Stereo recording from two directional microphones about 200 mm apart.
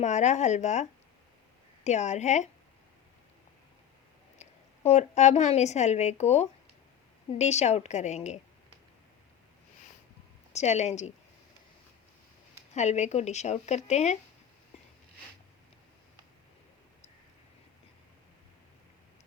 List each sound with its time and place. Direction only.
0.0 s speech: 35° left (ahead or behind)
4.4 s a woman's voice: 35° left (ahead or behind)
10.5 s speech: 35° left (ahead or behind)
12.7 s speech: 35° left (ahead or behind)